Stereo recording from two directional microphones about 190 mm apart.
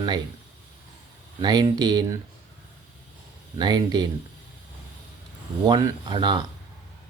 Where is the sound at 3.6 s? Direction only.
20° right (ahead or behind).